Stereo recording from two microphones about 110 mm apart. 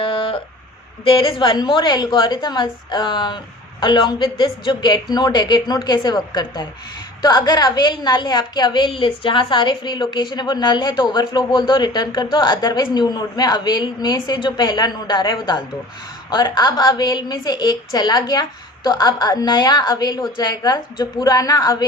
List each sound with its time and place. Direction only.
0.0 s a sound: 55° left (ahead or behind)
1.0 s a woman's voice: 55° left (ahead or behind)
8.9 s a woman's voice: 55° left (ahead or behind); by 21.8 s 35° left (ahead or behind)